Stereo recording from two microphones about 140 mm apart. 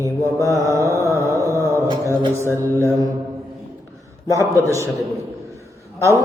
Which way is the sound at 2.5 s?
15° left (ahead or behind).